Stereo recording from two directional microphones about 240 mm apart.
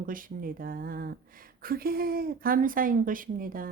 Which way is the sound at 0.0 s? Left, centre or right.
Right.